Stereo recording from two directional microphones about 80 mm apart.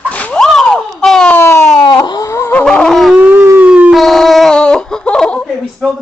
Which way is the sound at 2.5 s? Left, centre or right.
Centre.